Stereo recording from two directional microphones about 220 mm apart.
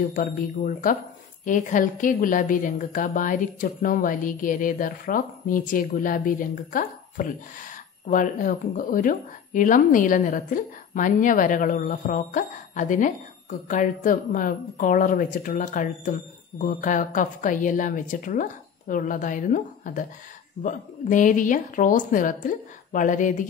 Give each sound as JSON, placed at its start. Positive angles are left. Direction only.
{"t": 0.1, "sound": "speech", "side_deg": 40}